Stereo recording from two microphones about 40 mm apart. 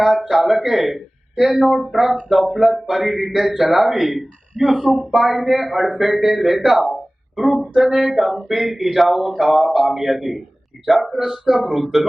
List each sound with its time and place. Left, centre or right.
0.0 s speech: centre
6.7 s a sound: centre
7.6 s speech: centre
8.0 s speech: centre
8.3 s speech: centre